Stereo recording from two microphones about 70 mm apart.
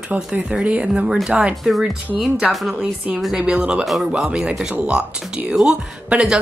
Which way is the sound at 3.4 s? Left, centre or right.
Centre.